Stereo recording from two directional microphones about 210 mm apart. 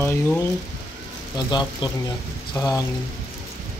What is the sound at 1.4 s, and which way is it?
Speech, 20° left (ahead or behind).